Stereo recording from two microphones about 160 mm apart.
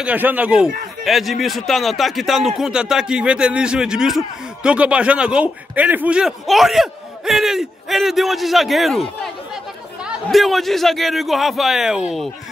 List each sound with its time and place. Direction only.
0.0 s a man's voice: 10° right (ahead or behind)
10.0 s a man's voice: centre (ahead or behind)